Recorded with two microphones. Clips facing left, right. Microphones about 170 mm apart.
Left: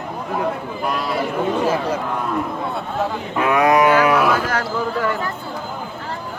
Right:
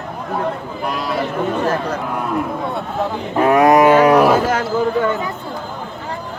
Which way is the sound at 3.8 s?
30° right (ahead or behind).